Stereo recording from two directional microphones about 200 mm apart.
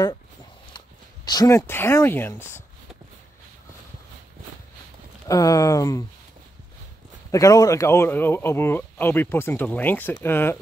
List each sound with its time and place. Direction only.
0.7 s speech: 20° left (ahead or behind)
5.3 s speech: 15° left (ahead or behind)
7.2 s speech: 15° left (ahead or behind)